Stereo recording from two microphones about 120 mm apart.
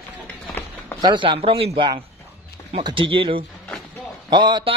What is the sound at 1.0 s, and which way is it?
A man's voice, 40° right (ahead or behind).